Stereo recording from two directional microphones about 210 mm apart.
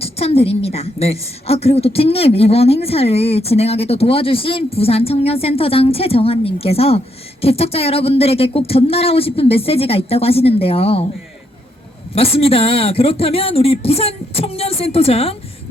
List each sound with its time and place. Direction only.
0.0 s a woman's voice: 30° left (ahead or behind)
12.1 s a woman's voice: 25° left (ahead or behind)